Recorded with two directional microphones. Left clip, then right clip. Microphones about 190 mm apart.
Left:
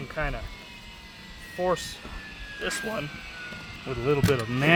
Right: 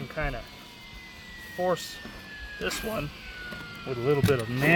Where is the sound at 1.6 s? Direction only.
15° left (ahead or behind).